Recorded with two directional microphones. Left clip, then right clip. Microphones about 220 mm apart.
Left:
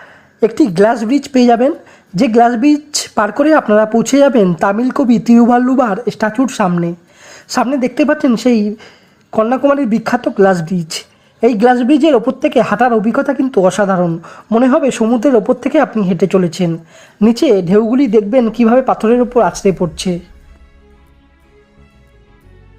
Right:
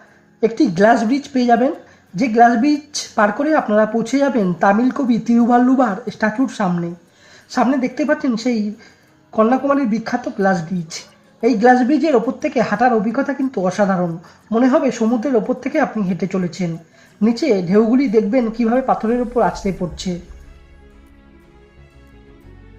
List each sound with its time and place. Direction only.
0.3 s speech: 35° left (ahead or behind)